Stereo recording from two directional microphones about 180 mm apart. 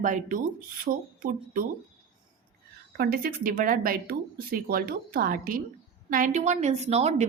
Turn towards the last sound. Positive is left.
turn(degrees=-35)  # may be behind; listen again after turning